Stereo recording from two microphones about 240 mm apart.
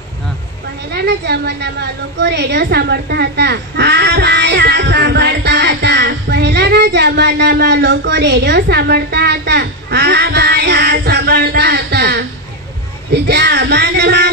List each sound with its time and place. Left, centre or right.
0.9 s a woman's voice: right